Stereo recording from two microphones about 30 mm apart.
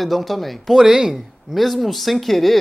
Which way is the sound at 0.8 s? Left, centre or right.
Centre.